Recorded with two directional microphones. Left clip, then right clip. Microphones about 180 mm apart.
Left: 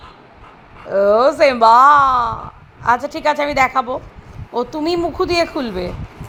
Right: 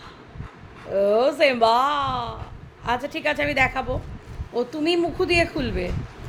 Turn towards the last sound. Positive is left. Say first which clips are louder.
# left 5 dB
turn(degrees=20)  # may be behind; listen again after turning